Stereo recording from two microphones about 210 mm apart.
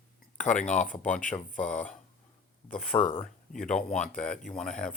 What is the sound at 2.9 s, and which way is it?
Speech, 20° left (ahead or behind).